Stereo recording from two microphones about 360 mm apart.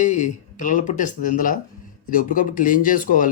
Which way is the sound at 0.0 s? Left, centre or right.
Centre.